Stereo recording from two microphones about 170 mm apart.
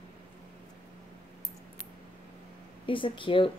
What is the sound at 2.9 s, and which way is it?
Speech, 30° left (ahead or behind).